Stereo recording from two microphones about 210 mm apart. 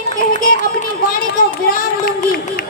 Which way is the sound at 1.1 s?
45° left (ahead or behind).